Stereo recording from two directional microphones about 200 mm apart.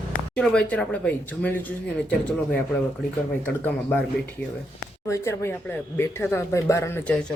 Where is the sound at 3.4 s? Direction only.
10° left (ahead or behind).